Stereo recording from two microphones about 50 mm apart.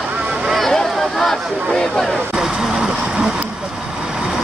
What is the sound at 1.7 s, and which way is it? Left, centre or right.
Speech, centre.